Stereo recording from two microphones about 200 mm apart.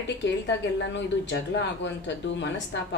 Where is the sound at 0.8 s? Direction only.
60° left (ahead or behind).